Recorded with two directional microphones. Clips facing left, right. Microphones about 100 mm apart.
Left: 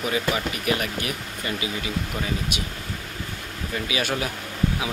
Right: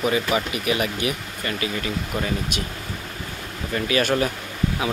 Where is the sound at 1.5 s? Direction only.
15° left (ahead or behind).